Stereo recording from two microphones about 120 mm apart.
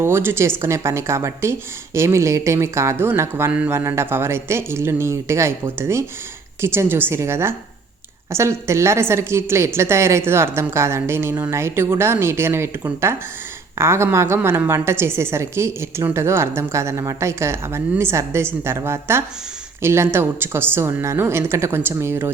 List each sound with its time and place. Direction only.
0.0 s a woman's voice: 20° right (ahead or behind)